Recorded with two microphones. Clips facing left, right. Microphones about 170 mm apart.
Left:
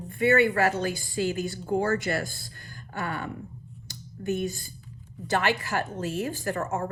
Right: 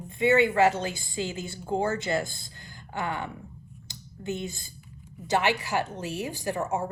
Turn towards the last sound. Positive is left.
turn(degrees=-15)  # may be behind; listen again after turning